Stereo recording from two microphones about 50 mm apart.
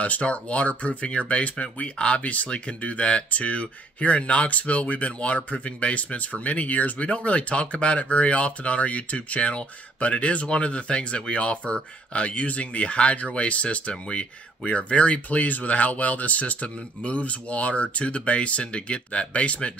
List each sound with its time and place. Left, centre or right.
0.0 s speech: left